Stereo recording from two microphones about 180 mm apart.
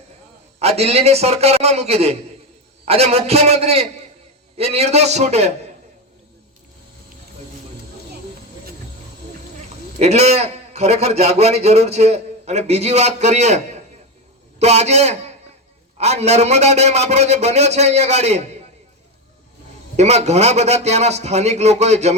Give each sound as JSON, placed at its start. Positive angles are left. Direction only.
{"t": 0.6, "sound": "a man's voice", "side_deg": -35}
{"t": 10.0, "sound": "a man's voice", "side_deg": -35}
{"t": 20.0, "sound": "a man's voice", "side_deg": -40}